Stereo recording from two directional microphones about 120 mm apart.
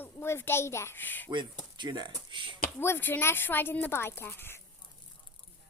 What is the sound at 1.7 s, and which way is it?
Speech, 40° right (ahead or behind).